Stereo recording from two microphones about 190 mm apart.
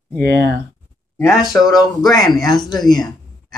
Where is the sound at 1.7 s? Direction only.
20° left (ahead or behind).